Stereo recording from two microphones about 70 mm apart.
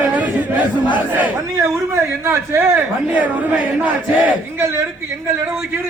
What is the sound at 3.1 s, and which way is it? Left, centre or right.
Speech, right.